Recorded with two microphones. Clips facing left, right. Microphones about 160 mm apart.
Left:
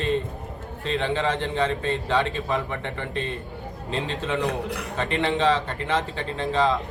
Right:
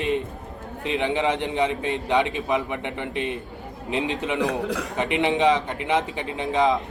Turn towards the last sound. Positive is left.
turn(degrees=-15)  # may be behind; listen again after turning